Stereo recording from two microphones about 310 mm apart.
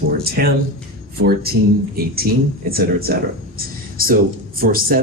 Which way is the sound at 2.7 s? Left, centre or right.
Right.